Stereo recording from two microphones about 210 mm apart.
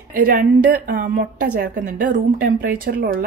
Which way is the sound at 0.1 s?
45° right (ahead or behind).